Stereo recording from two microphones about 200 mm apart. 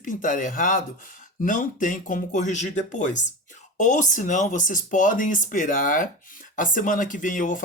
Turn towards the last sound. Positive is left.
turn(degrees=40)  # may be behind; listen again after turning